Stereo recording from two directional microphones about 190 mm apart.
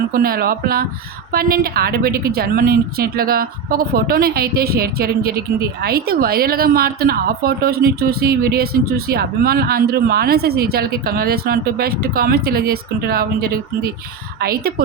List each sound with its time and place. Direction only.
0.1 s a woman's voice: 50° right (ahead or behind)